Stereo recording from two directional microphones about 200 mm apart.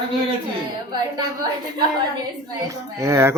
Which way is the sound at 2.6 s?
15° right (ahead or behind).